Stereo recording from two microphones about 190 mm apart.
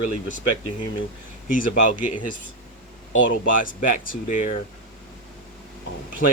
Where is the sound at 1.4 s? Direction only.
45° left (ahead or behind).